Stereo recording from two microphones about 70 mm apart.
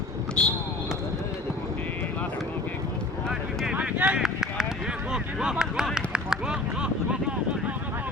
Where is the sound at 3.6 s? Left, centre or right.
Centre.